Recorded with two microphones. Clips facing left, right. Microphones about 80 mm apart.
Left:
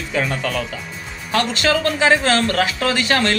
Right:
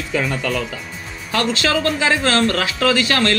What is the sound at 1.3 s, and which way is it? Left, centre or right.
Speech, left.